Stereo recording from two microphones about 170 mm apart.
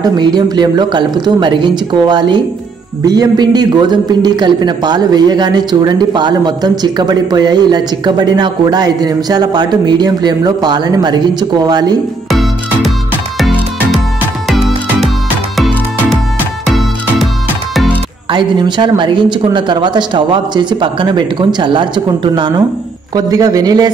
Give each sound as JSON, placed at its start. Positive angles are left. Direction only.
{"t": 0.0, "sound": "a man's voice", "side_deg": -25}
{"t": 12.3, "sound": "music", "side_deg": 0}
{"t": 15.5, "sound": "music", "side_deg": 0}
{"t": 18.3, "sound": "a man's voice", "side_deg": -25}